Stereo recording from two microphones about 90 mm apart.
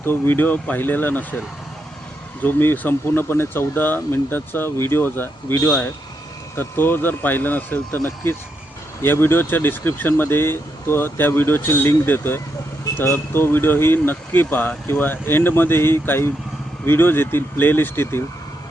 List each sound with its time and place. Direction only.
0.0 s speech: 25° left (ahead or behind)
2.4 s speech: 20° left (ahead or behind)
6.6 s speech: 25° left (ahead or behind)